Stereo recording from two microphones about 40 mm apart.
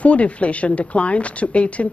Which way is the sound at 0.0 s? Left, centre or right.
Left.